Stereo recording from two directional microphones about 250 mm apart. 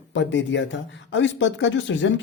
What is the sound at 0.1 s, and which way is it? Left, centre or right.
Speech, left.